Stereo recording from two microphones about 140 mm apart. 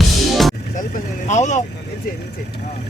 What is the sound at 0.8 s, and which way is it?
Vehicle, 65° left (ahead or behind).